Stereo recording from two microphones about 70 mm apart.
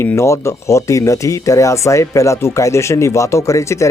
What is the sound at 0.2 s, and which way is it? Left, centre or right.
Speech, left.